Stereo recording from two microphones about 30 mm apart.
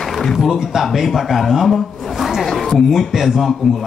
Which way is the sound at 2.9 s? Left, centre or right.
Centre.